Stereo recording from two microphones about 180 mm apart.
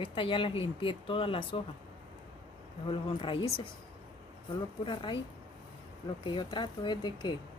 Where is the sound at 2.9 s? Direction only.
30° left (ahead or behind).